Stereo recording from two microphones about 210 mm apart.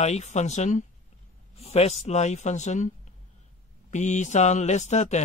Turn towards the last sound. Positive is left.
turn(degrees=35)  # may be behind; listen again after turning